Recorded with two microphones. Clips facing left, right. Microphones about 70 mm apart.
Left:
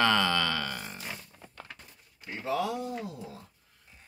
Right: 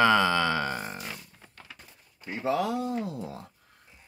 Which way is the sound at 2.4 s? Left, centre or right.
Right.